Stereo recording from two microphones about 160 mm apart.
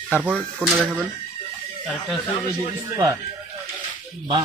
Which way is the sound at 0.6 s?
10° right (ahead or behind).